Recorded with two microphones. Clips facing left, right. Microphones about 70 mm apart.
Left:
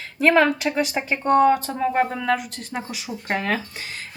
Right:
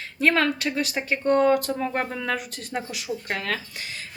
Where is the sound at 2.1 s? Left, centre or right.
Centre.